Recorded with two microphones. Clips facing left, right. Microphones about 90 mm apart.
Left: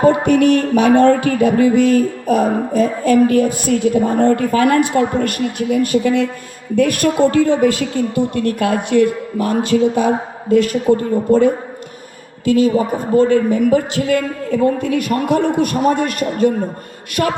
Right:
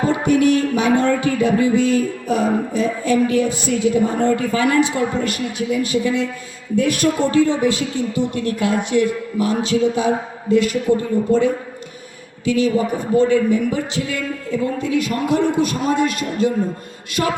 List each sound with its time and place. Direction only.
0.0 s music: 55° left (ahead or behind)